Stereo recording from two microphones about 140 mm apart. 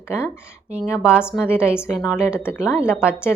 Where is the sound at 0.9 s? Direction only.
20° left (ahead or behind).